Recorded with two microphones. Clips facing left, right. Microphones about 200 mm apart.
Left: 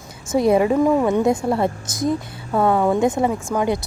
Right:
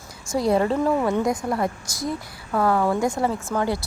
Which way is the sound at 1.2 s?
25° left (ahead or behind).